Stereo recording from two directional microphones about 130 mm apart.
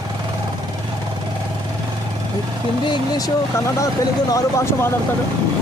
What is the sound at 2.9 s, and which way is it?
Speech, 30° left (ahead or behind).